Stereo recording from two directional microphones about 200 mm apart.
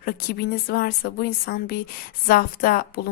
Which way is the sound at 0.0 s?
50° left (ahead or behind).